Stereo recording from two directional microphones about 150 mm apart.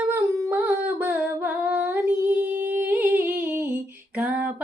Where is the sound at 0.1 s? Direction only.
15° right (ahead or behind).